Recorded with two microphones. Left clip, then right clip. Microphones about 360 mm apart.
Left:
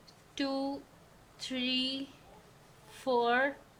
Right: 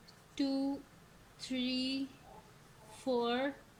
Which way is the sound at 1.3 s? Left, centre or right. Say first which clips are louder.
Left 5 dB; left.